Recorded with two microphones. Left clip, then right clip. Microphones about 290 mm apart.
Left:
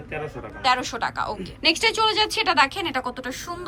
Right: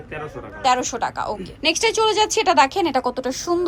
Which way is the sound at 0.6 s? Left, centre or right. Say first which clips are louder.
Right 3 dB; centre.